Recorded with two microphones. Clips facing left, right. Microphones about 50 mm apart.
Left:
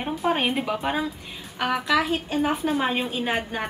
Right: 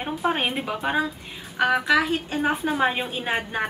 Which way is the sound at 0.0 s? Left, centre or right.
Centre.